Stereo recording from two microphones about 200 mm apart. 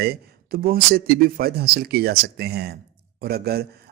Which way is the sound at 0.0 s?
50° right (ahead or behind).